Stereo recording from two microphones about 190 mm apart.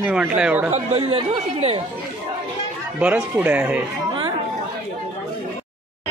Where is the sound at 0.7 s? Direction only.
35° right (ahead or behind).